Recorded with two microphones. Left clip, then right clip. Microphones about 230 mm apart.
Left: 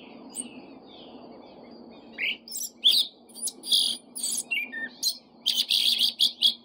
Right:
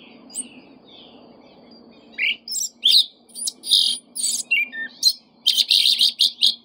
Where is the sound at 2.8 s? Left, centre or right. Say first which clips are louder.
Right 6 dB; centre.